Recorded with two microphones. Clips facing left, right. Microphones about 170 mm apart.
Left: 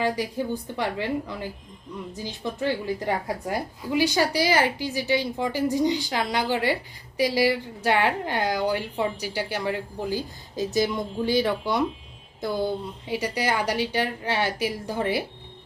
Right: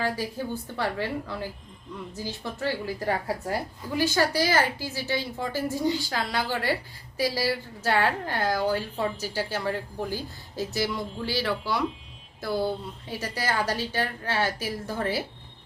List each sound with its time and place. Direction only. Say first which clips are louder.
0.0 s a woman's voice: left 3 dB; 15° left (ahead or behind)